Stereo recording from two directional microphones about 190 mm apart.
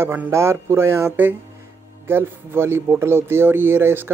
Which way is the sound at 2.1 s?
10° right (ahead or behind).